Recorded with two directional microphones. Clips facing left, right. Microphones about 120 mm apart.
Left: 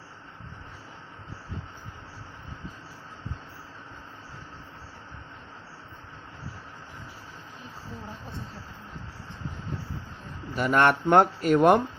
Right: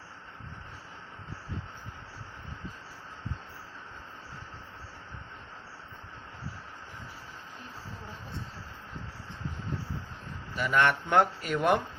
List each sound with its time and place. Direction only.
10.5 s speech: 45° left (ahead or behind)